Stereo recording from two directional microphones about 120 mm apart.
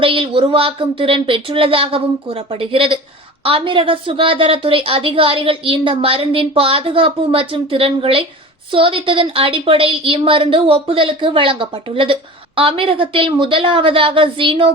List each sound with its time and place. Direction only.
0.0 s a woman's voice: 50° right (ahead or behind)